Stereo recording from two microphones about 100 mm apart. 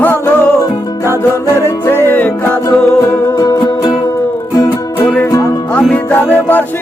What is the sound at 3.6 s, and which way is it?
Music, 45° left (ahead or behind).